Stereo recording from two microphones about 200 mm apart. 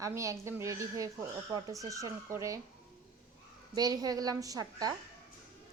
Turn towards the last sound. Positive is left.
turn(degrees=-20)  # may be behind; listen again after turning